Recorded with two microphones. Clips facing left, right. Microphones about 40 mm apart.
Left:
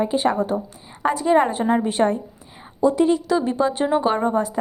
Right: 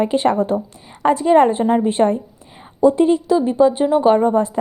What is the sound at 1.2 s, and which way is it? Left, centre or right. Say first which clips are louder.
A woman's voice: right 4 dB; right.